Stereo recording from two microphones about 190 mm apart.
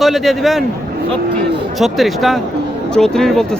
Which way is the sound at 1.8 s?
Centre (ahead or behind).